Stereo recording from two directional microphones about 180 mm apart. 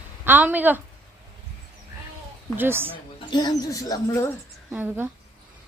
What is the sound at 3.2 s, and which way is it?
Speech, 25° left (ahead or behind).